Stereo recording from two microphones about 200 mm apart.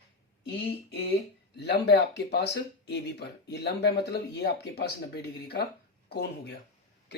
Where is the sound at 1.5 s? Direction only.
55° left (ahead or behind).